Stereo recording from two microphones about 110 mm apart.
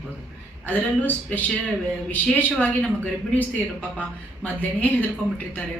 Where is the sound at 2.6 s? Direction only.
15° left (ahead or behind).